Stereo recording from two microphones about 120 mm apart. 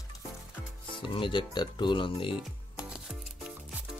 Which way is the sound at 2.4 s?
5° right (ahead or behind).